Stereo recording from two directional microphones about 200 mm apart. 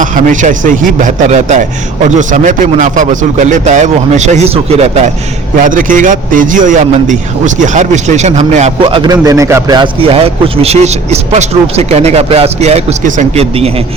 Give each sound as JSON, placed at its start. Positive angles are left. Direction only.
{"t": 0.0, "sound": "a man's voice", "side_deg": -40}
{"t": 5.6, "sound": "a man's voice", "side_deg": -40}